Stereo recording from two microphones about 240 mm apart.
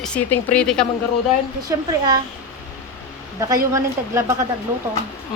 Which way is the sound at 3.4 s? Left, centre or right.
Centre.